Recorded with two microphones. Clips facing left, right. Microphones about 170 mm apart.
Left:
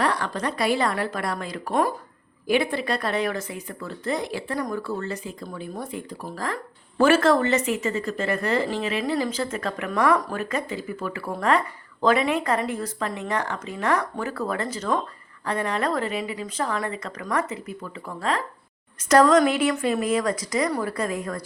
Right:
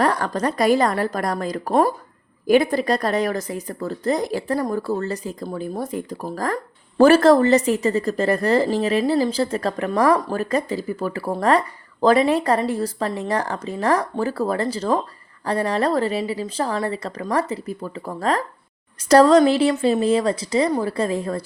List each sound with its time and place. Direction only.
0.0 s a woman's voice: 45° right (ahead or behind)